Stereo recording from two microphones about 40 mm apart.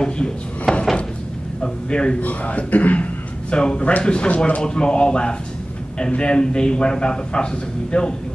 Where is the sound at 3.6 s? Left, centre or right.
Left.